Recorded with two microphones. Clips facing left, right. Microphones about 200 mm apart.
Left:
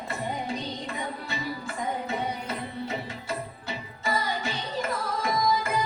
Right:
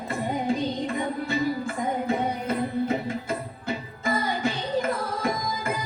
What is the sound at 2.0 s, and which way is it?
Music, 50° right (ahead or behind).